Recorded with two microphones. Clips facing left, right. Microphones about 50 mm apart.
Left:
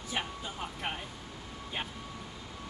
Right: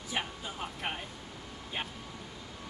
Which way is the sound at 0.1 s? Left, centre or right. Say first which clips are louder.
Even; centre.